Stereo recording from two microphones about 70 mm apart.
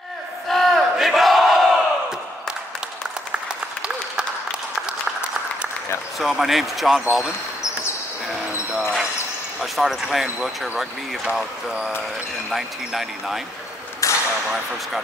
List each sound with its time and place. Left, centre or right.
0.5 s battle cry: centre
6.1 s speech: centre
9.6 s speech: centre
14.0 s a sound: left